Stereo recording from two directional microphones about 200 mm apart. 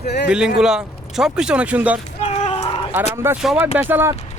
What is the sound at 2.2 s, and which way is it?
Chicken, 30° left (ahead or behind).